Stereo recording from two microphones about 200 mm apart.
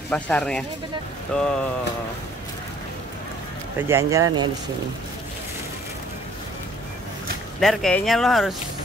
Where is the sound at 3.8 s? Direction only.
10° right (ahead or behind).